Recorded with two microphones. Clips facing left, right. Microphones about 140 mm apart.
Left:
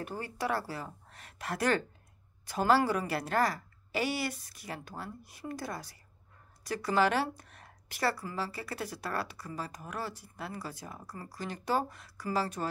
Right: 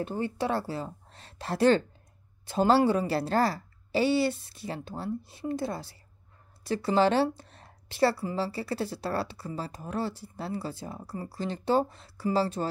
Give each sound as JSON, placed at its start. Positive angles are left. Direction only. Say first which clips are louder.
{"t": 0.0, "sound": "speech", "louder": "right 6 dB", "side_deg": -25}